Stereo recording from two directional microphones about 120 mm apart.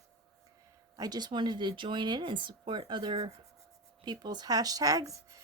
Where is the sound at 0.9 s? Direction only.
35° right (ahead or behind).